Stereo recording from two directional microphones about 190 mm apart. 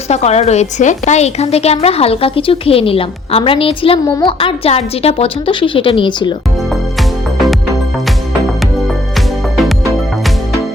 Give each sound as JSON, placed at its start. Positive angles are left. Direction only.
{"t": 0.1, "sound": "a woman's voice", "side_deg": 35}